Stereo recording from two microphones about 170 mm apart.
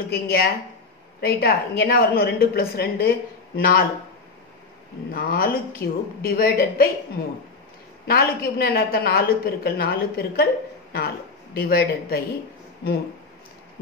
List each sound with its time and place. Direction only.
0.1 s a woman's voice: 65° left (ahead or behind)
5.1 s a woman's voice: 60° left (ahead or behind)
8.1 s a woman's voice: 65° left (ahead or behind)